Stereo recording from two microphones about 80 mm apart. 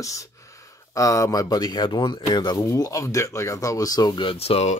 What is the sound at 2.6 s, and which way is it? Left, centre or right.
Speech, left.